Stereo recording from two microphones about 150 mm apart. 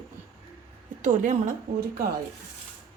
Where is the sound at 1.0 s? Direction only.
55° right (ahead or behind).